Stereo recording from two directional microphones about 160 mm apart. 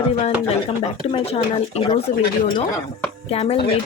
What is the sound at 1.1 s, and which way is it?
Speech, 40° left (ahead or behind).